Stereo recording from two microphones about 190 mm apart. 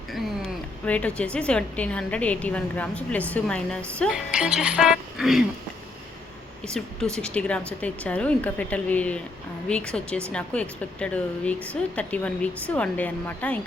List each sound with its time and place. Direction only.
0.1 s a woman's voice: centre (ahead or behind)
6.7 s a woman's voice: 5° left (ahead or behind)